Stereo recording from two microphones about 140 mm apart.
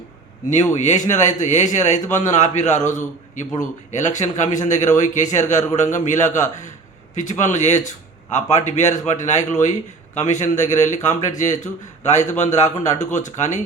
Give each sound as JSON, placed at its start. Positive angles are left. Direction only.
{"t": 0.7, "sound": "a man's voice", "side_deg": 55}